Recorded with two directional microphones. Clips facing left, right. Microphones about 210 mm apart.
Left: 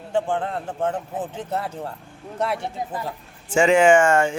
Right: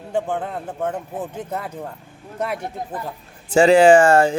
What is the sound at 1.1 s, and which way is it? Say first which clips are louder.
Speech: even; 10° right (ahead or behind).